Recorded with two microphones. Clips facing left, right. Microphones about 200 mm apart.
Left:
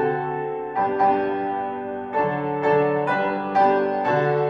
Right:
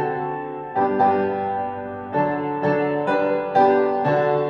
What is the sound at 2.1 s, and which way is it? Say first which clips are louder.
Music: right 2 dB; 30° right (ahead or behind).